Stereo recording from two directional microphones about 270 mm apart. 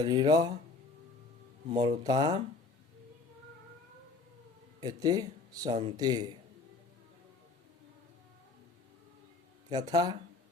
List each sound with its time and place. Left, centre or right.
0.0 s speech: centre
1.7 s speech: centre
4.8 s speech: centre
9.6 s speech: centre